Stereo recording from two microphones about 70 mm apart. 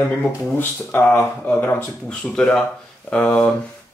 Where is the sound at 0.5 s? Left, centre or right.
Left.